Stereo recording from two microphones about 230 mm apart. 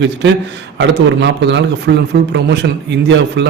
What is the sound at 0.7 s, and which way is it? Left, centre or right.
A man's voice, right.